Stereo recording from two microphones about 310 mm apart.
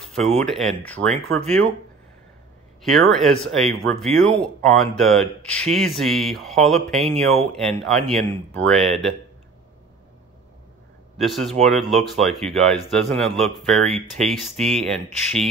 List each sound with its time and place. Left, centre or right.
0.0 s a sound: centre
0.4 s speech: centre
2.8 s speech: centre
11.1 s speech: centre